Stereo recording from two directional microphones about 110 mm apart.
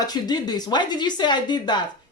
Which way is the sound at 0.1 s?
40° left (ahead or behind).